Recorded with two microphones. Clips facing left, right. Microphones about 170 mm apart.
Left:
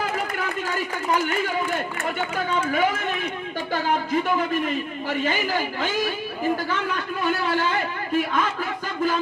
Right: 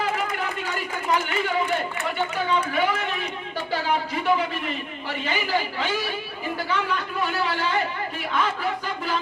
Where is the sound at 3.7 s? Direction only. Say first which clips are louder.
Left 2 dB; 50° left (ahead or behind).